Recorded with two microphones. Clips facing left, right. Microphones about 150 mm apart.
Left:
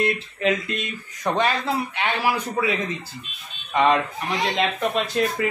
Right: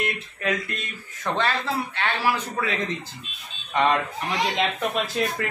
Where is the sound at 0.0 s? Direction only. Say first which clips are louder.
Left 6 dB; 25° left (ahead or behind).